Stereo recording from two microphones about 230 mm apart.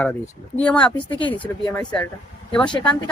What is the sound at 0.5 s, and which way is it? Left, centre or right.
Speech, centre.